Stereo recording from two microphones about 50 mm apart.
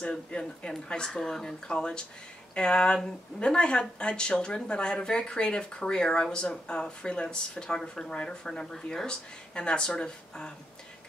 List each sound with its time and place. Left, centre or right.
0.0 s speech: left